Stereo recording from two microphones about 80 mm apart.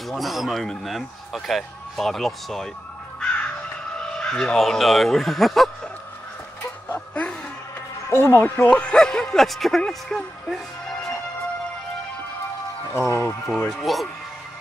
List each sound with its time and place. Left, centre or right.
0.1 s a man's voice: centre
3.2 s crow: centre
4.0 s speech: centre
6.9 s laughter: left
8.1 s speech: left
8.7 s speech: centre
12.9 s speech: left
13.7 s a man's voice: centre